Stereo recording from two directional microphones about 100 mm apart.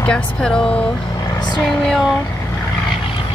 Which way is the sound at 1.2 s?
45° left (ahead or behind).